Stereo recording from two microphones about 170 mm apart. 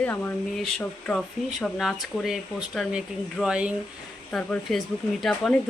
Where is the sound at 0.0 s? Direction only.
10° left (ahead or behind).